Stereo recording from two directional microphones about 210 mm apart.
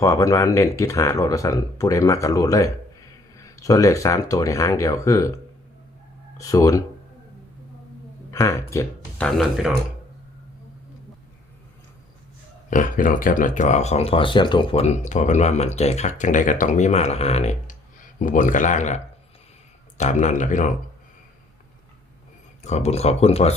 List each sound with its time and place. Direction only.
0.0 s speech: 15° left (ahead or behind)
6.4 s speech: 15° left (ahead or behind)
8.3 s speech: 15° left (ahead or behind); by 9.7 s centre (ahead or behind)
12.7 s speech: 40° left (ahead or behind)
22.6 s speech: 30° left (ahead or behind)